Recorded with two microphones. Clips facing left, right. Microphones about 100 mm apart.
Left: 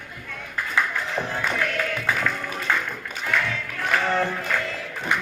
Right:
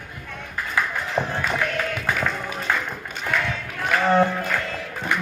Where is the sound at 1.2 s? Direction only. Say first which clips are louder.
Right 3 dB; 15° right (ahead or behind).